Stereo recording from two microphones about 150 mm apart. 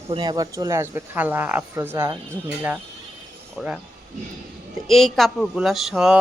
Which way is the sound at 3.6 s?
Centre (ahead or behind).